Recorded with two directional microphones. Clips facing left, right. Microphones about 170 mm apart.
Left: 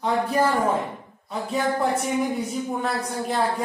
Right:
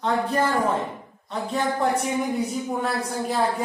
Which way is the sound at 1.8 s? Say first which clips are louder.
Even; centre (ahead or behind).